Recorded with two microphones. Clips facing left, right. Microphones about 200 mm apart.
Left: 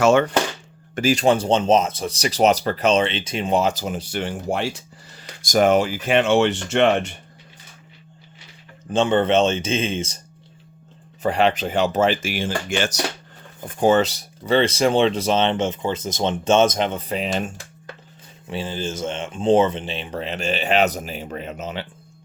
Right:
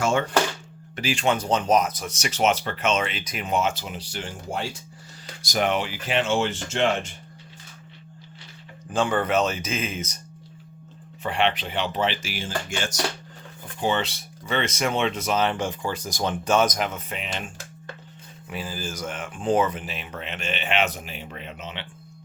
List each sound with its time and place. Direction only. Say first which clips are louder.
0.0 s speech: left 8 dB; 70° left (ahead or behind)
0.9 s speech: left 7 dB; 40° left (ahead or behind); by 4.8 s 75° left (ahead or behind)
5.4 s speech: left 8 dB; 45° left (ahead or behind); by 7.2 s 65° left (ahead or behind)
8.9 s speech: left 5 dB; 25° left (ahead or behind)
11.2 s speech: left 5 dB; 40° left (ahead or behind); by 13.0 s 70° left (ahead or behind)
13.7 s speech: left 8 dB; 45° left (ahead or behind)
18.4 s speech: left 6 dB; 25° left (ahead or behind)